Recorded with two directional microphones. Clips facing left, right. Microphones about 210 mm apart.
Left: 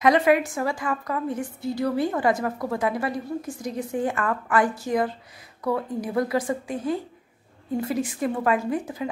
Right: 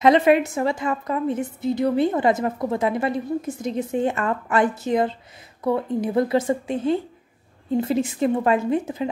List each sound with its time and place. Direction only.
0.0 s a woman's voice: 25° right (ahead or behind)